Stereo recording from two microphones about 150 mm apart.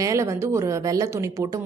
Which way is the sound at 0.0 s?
20° right (ahead or behind).